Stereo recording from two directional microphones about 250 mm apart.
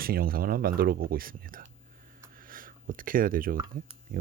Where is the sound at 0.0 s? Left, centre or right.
Right.